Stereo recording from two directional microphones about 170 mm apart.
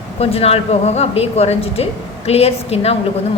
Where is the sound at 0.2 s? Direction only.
35° left (ahead or behind).